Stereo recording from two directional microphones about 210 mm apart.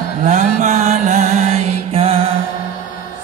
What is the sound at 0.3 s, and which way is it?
Music, 35° right (ahead or behind).